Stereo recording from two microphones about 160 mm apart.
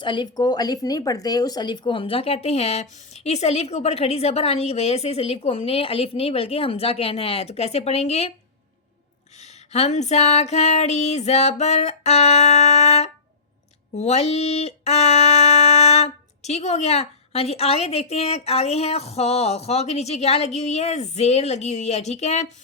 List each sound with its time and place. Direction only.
0.0 s speech: 30° left (ahead or behind)
9.4 s speech: 45° left (ahead or behind)